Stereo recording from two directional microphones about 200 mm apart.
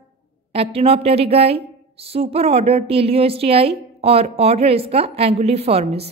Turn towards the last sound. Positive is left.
turn(degrees=-30)  # may be behind; listen again after turning